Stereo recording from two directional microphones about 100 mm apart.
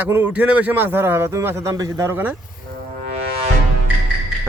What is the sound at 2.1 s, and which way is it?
Speech, 20° right (ahead or behind).